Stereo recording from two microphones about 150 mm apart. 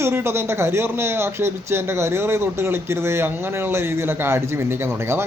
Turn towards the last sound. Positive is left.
turn(degrees=-15)  # may be behind; listen again after turning